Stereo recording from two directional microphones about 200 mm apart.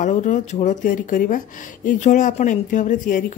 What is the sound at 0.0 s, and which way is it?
Speech, 40° left (ahead or behind).